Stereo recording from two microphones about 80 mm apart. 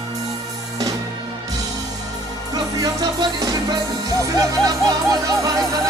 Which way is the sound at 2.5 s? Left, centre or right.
Right.